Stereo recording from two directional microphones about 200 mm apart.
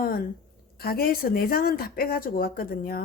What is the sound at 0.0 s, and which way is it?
A woman's voice, 45° left (ahead or behind).